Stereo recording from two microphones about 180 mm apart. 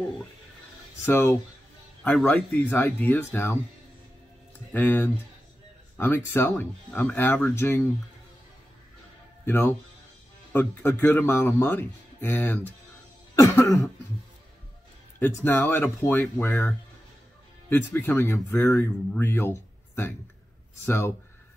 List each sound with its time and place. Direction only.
1.0 s speech: 10° left (ahead or behind)
4.7 s speech: 10° left (ahead or behind)
9.5 s speech: 10° left (ahead or behind)
15.1 s speech: 10° left (ahead or behind)